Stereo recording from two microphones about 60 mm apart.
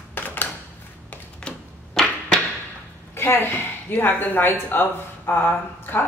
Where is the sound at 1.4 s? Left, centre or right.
Centre.